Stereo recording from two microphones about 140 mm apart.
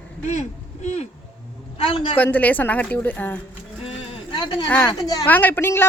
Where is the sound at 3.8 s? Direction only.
35° left (ahead or behind).